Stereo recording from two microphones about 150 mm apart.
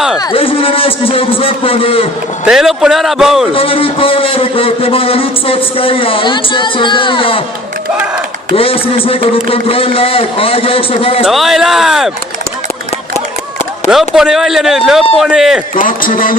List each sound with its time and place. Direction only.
0.2 s a man's voice: 35° left (ahead or behind)
2.5 s speech: 5° right (ahead or behind)
3.5 s a man's voice: 35° left (ahead or behind)
8.5 s a man's voice: 40° left (ahead or behind)
11.3 s speech: centre (ahead or behind)
13.9 s speech: 5° right (ahead or behind)
15.7 s speech: 65° left (ahead or behind)